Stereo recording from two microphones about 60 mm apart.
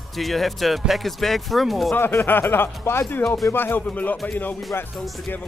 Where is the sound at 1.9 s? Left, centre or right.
Left.